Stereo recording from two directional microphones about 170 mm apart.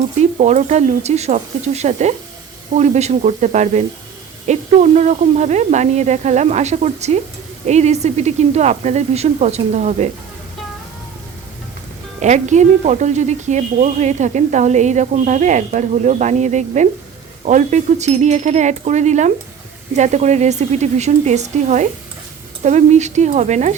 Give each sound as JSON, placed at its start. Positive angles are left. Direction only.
{"t": 0.2, "sound": "a woman's voice", "side_deg": -40}
{"t": 12.2, "sound": "a woman's voice", "side_deg": -45}